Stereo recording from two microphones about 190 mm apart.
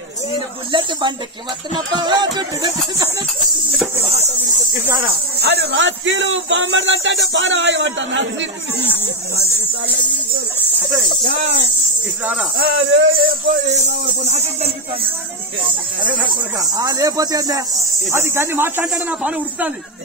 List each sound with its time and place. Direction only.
0.7 s speech: 25° right (ahead or behind)
4.5 s a sound: 10° right (ahead or behind)
5.4 s speech: 60° right (ahead or behind)
12.6 s speech: 90° right
13.1 s speech: 55° right (ahead or behind)
13.8 s a sound: 35° right (ahead or behind)
16.1 s speech: 20° right (ahead or behind)